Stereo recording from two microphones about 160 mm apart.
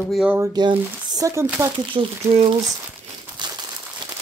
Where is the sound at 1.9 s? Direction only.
35° right (ahead or behind).